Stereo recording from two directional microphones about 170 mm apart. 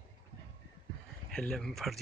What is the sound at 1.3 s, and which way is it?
Speech, 5° left (ahead or behind).